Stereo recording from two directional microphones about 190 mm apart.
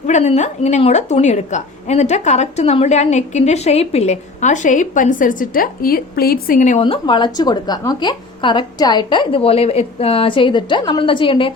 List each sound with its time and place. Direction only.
0.1 s a woman's voice: 35° left (ahead or behind); by 6.6 s 50° left (ahead or behind)
6.6 s speech: 35° left (ahead or behind)